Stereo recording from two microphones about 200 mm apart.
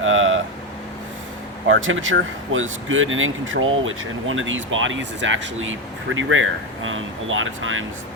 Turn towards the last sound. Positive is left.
turn(degrees=-80)